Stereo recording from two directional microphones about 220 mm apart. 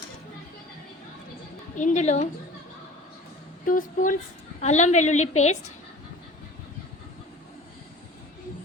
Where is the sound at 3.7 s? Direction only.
35° left (ahead or behind).